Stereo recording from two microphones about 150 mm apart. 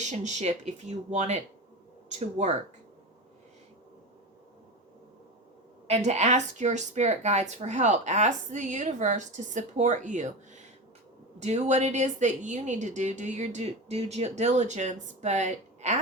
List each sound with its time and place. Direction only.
0.0 s speech: 50° right (ahead or behind)
5.9 s speech: 50° right (ahead or behind)